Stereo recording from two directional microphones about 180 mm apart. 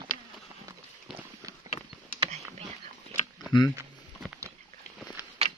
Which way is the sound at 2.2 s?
35° right (ahead or behind).